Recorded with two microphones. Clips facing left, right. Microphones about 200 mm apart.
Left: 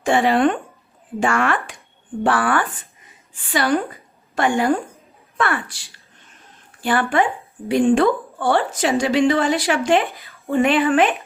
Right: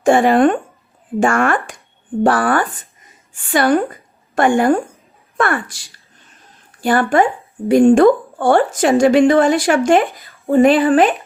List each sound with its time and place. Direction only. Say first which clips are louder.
0.0 s a woman's voice: right 5 dB; 45° right (ahead or behind)